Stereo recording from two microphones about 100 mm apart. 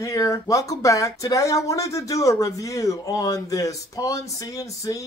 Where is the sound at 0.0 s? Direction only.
35° left (ahead or behind).